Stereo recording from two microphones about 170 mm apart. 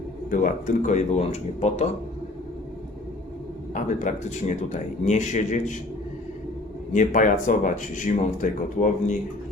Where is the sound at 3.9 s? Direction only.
45° left (ahead or behind).